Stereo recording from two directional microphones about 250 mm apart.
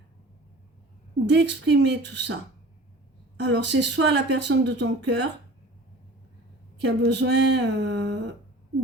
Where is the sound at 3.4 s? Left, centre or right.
Right.